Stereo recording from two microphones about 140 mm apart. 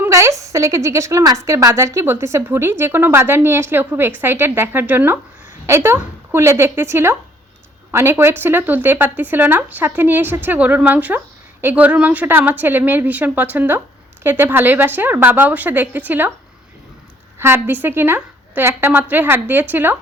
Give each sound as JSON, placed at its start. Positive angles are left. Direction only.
{"t": 0.0, "sound": "a woman's voice", "side_deg": -20}
{"t": 17.4, "sound": "a woman's voice", "side_deg": -15}